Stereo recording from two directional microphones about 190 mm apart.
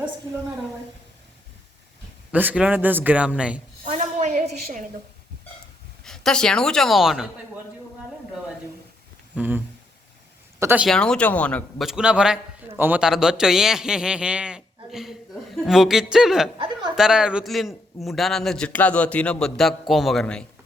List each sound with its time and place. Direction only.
2.3 s a man's voice: 10° right (ahead or behind)
3.8 s a sound: 35° right (ahead or behind)
6.1 s a man's voice: 5° left (ahead or behind)
9.3 s speech: 5° right (ahead or behind)
10.6 s speech: 10° right (ahead or behind)
10.8 s a man's voice: 5° left (ahead or behind)